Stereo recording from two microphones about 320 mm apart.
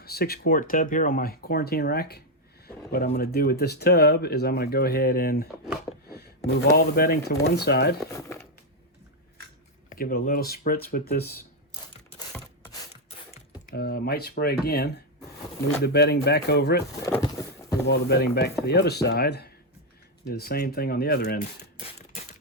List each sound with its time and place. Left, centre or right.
0.0 s speech: left
9.9 s speech: left
12.3 s a sound: centre; by 14.9 s left
15.8 s speech: left
17.0 s a sound: centre
17.8 s speech: left